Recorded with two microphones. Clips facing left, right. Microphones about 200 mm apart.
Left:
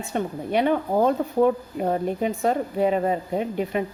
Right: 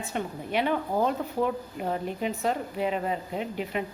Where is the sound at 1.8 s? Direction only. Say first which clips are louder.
Left 6 dB; 45° left (ahead or behind).